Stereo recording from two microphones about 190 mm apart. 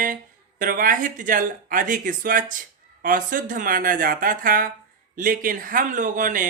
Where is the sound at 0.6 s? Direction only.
45° right (ahead or behind).